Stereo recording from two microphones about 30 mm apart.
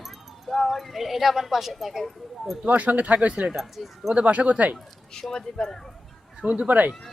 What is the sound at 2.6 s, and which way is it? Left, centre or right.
Speech, right.